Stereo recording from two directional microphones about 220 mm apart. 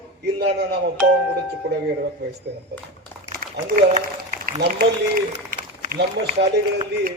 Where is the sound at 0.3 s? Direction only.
50° right (ahead or behind).